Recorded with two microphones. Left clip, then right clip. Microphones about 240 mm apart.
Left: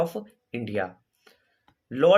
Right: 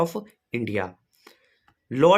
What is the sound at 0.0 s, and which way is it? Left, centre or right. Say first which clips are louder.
Speech: right 2 dB; right.